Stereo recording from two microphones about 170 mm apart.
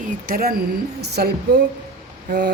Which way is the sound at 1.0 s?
75° right (ahead or behind).